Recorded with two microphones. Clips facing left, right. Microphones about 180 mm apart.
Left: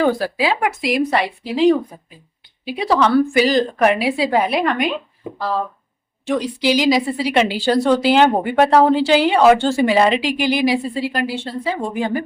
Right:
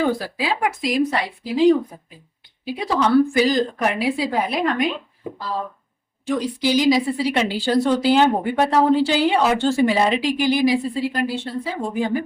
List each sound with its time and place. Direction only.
0.0 s a woman's voice: 75° left (ahead or behind)
6.2 s a woman's voice: 75° left (ahead or behind)